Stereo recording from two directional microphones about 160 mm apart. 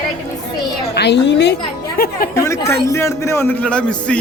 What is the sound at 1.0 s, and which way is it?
Speech, 90° left.